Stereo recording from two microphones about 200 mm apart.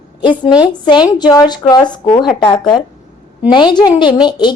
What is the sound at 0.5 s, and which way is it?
A woman's voice, 20° left (ahead or behind).